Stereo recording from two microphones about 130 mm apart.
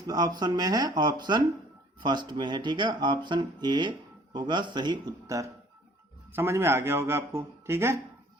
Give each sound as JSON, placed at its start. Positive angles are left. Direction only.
{"t": 0.1, "sound": "speech", "side_deg": -30}